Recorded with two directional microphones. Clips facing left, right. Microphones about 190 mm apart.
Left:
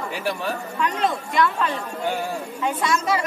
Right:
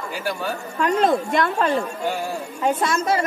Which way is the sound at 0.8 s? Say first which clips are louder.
Right 7 dB; 45° right (ahead or behind).